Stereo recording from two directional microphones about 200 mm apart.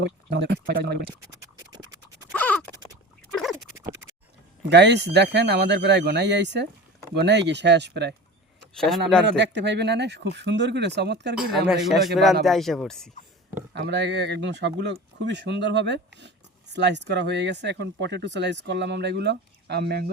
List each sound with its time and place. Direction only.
0.0 s speech: 60° right (ahead or behind)
1.7 s scratch: 20° right (ahead or behind)
2.3 s scratch: 5° left (ahead or behind)
4.7 s speech: 60° right (ahead or behind)
9.2 s speech: 60° right (ahead or behind)
11.7 s speech: centre (ahead or behind)
13.7 s speech: 60° right (ahead or behind)